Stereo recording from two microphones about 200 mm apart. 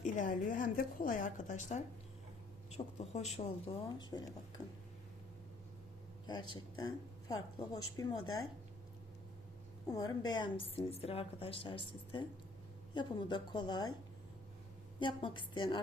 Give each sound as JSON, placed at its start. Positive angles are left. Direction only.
{"t": 0.0, "sound": "a woman's voice", "side_deg": 40}
{"t": 3.8, "sound": "a woman's voice", "side_deg": 20}
{"t": 6.2, "sound": "a woman's voice", "side_deg": 20}
{"t": 9.9, "sound": "a woman's voice", "side_deg": 20}
{"t": 14.9, "sound": "a woman's voice", "side_deg": 25}